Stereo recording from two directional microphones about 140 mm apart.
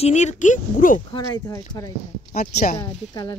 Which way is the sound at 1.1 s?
25° left (ahead or behind).